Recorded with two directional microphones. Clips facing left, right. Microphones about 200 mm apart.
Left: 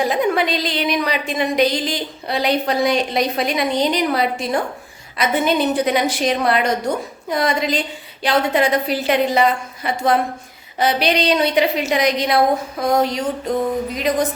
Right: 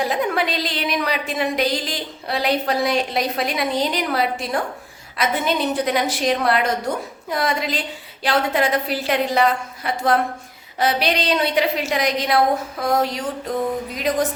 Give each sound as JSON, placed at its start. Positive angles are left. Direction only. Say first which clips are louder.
{"t": 0.0, "sound": "a woman's voice", "louder": "left 3 dB", "side_deg": 0}